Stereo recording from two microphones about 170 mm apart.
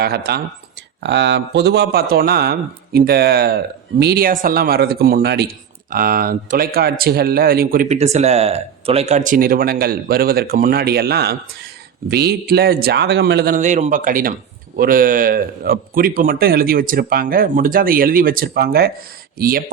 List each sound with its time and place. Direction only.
0.0 s a man's voice: 70° right (ahead or behind)
1.0 s a man's voice: 90° right; by 5.5 s 75° right (ahead or behind)
5.9 s speech: 60° right (ahead or behind)
7.9 s a man's voice: 40° right (ahead or behind); by 13.6 s 70° right (ahead or behind)
13.6 s speech: 45° right (ahead or behind)